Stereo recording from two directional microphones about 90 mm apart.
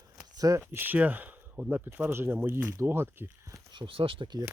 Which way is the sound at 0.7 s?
20° right (ahead or behind).